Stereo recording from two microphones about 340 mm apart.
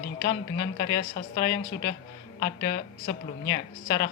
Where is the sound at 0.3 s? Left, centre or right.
Left.